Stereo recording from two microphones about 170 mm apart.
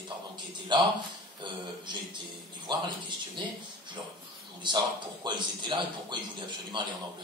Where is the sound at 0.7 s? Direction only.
25° right (ahead or behind).